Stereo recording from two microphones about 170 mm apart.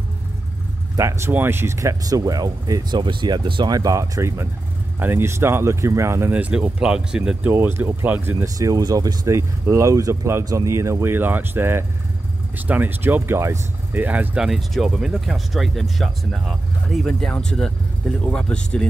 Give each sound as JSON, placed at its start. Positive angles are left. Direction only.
{"t": 0.9, "sound": "speech", "side_deg": -15}